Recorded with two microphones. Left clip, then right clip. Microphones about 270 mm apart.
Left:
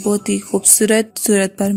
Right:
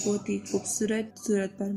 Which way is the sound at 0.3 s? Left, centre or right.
Left.